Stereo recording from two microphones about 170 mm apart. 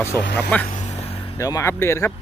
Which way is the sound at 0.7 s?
45° left (ahead or behind).